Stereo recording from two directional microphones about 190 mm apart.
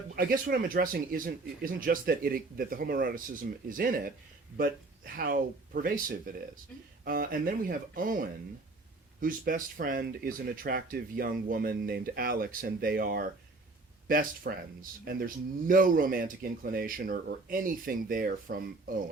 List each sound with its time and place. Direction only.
0.2 s speech: 50° right (ahead or behind)